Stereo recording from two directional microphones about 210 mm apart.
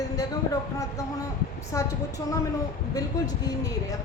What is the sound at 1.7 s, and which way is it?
Speech, 15° left (ahead or behind).